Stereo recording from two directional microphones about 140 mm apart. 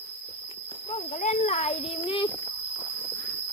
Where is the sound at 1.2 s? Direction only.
55° left (ahead or behind).